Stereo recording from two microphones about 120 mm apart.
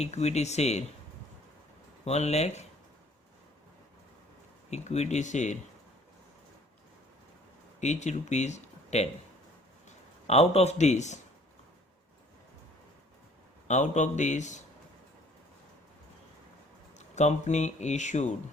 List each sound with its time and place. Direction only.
0.0 s speech: 65° left (ahead or behind)
2.0 s speech: 65° left (ahead or behind)
4.7 s speech: 65° left (ahead or behind)
7.8 s speech: 70° left (ahead or behind)
10.2 s speech: 60° left (ahead or behind); by 11.2 s 75° left (ahead or behind)
13.7 s a man's voice: 75° left (ahead or behind)
17.2 s speech: 75° left (ahead or behind)